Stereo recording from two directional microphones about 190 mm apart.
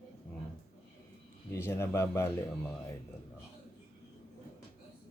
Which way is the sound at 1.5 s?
15° left (ahead or behind).